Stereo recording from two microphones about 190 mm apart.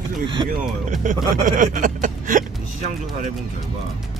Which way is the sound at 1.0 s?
45° right (ahead or behind).